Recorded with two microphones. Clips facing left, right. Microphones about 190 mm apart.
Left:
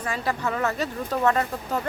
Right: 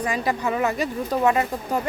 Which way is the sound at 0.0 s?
15° right (ahead or behind).